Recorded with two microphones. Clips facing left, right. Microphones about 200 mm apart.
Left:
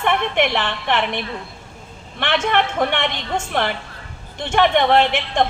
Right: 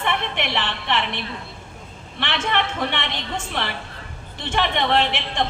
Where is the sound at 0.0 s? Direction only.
50° left (ahead or behind).